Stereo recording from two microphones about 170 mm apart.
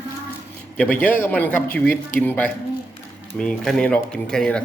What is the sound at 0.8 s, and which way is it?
A man's voice, 10° left (ahead or behind).